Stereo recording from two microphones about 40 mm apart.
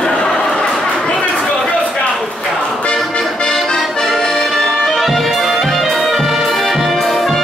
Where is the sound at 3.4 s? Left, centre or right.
Centre.